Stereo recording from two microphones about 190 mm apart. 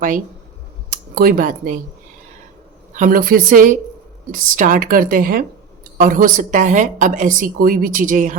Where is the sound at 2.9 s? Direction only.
45° right (ahead or behind).